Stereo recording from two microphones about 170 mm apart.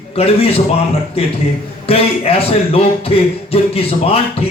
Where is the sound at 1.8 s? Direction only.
35° left (ahead or behind).